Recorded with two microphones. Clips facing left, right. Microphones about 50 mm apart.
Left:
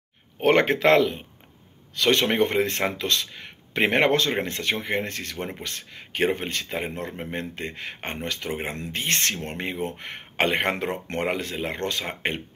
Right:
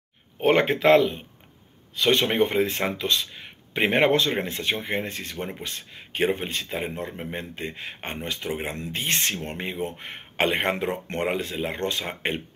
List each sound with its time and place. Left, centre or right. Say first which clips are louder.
0.4 s speech: left 1 dB; left
2.0 s speech: even; left
8.5 s speech: right 1 dB; left
8.7 s speech: even; left